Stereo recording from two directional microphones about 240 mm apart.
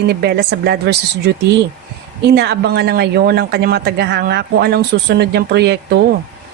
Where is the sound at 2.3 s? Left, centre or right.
Right.